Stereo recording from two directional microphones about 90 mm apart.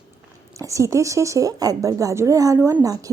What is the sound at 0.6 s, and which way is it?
A woman's voice, 35° right (ahead or behind).